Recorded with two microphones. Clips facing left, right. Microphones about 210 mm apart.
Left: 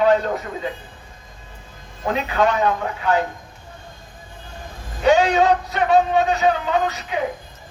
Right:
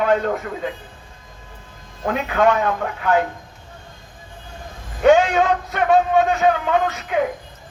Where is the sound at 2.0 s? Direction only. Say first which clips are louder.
Right 2 dB; 55° right (ahead or behind).